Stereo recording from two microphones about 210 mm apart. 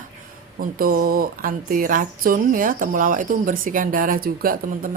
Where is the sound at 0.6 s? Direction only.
45° right (ahead or behind).